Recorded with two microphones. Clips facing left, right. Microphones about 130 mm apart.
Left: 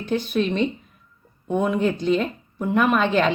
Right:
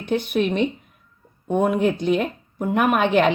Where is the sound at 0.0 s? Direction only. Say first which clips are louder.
Right 1 dB; 15° right (ahead or behind).